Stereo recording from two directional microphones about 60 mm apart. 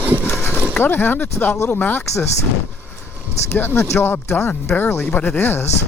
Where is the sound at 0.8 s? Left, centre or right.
Left.